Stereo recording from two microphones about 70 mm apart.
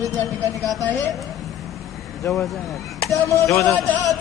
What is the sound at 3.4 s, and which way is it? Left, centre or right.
Speech, left.